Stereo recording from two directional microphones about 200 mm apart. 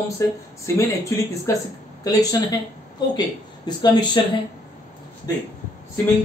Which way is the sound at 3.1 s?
20° left (ahead or behind).